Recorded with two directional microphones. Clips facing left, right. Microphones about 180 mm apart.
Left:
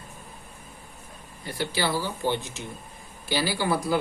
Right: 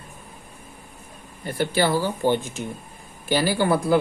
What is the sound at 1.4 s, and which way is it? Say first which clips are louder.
Speech: right 6 dB; 50° right (ahead or behind).